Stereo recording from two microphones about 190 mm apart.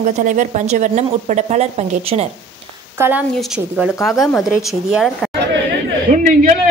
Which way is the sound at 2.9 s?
10° right (ahead or behind).